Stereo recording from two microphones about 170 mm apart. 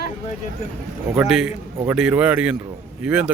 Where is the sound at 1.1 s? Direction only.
Centre (ahead or behind).